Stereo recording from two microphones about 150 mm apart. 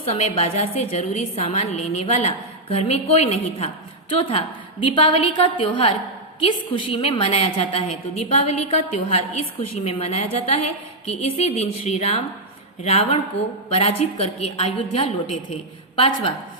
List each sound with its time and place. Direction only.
0.0 s a woman's voice: 45° left (ahead or behind)